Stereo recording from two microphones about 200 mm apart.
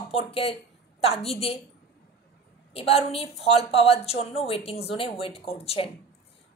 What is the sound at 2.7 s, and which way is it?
Speech, 30° left (ahead or behind).